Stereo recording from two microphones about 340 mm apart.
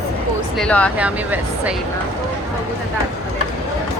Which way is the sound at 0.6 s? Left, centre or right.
Centre.